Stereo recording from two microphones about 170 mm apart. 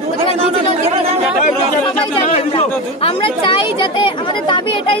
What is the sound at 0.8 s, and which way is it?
Speech, 35° right (ahead or behind).